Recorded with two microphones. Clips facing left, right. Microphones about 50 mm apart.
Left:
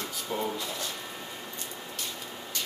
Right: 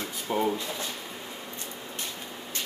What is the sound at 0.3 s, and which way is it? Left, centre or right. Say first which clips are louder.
Drawer open or close: right 5 dB; right.